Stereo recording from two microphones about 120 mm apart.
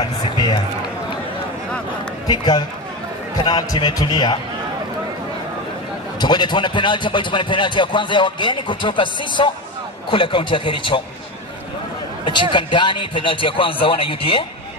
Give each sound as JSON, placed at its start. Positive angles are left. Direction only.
{"t": 0.0, "sound": "run", "side_deg": 35}
{"t": 2.2, "sound": "a man's voice", "side_deg": 35}
{"t": 6.1, "sound": "a man's voice", "side_deg": 40}
{"t": 12.3, "sound": "a man's voice", "side_deg": 40}